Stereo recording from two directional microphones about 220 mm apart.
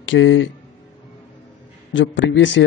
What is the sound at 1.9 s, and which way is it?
Speech, 55° left (ahead or behind).